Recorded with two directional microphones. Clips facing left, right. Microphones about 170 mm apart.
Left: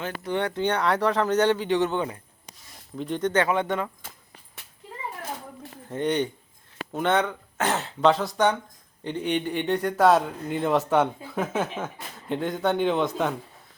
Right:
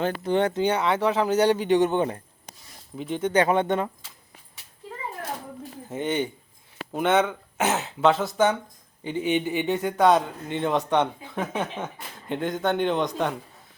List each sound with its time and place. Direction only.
0.0 s speech: 25° right (ahead or behind)
0.6 s speech: 5° right (ahead or behind)
2.0 s a sound: 45° right (ahead or behind)
3.0 s speech: 5° right (ahead or behind)
3.4 s speech: 25° right (ahead or behind)
5.9 s a man's voice: 5° right (ahead or behind)